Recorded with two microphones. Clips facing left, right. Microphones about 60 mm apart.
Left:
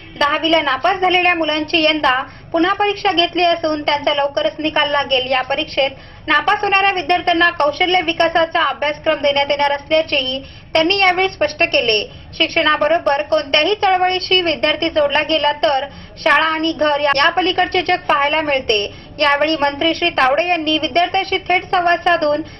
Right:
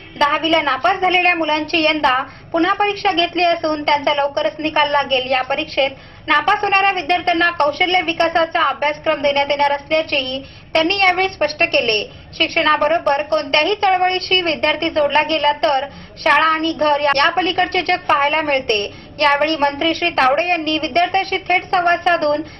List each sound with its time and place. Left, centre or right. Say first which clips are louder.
0.2 s a woman's voice: even; centre
1.6 s a woman's voice: left 1 dB; right
2.0 s speech: even; centre
3.7 s a woman's voice: right 1 dB; centre
4.5 s speech: even; centre
14.0 s a woman's voice: left 1 dB; centre
14.6 s speech: left 1 dB; centre